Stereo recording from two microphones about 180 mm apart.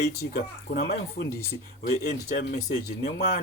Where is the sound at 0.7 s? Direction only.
60° left (ahead or behind).